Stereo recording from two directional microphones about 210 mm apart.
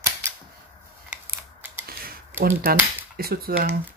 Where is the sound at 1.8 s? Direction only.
45° right (ahead or behind).